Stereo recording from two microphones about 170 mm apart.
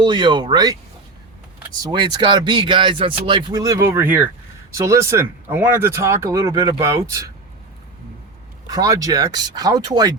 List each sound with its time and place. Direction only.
0.0 s speech: 30° right (ahead or behind)
1.8 s speech: 25° right (ahead or behind)
8.6 s speech: 20° right (ahead or behind)